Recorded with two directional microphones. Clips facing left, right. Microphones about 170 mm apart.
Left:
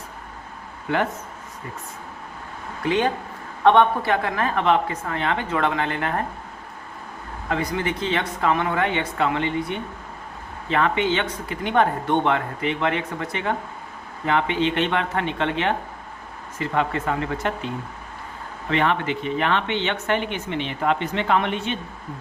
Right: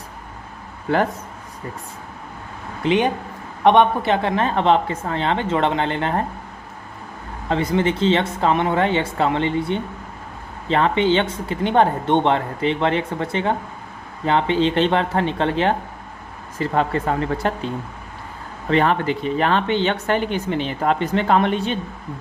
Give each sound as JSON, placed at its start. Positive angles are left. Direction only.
{"t": 0.9, "sound": "speech", "side_deg": -35}
{"t": 2.8, "sound": "speech", "side_deg": -20}
{"t": 7.5, "sound": "speech", "side_deg": -25}
{"t": 18.7, "sound": "speech", "side_deg": -40}